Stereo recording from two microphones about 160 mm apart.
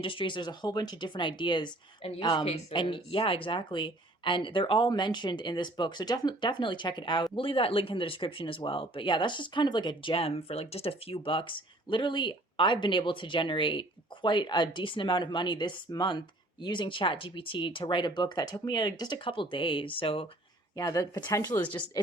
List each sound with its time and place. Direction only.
0.0 s speech: 30° left (ahead or behind)
20.7 s speech: 25° left (ahead or behind)